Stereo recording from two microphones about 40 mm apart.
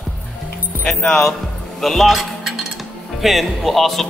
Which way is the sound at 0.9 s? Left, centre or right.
Centre.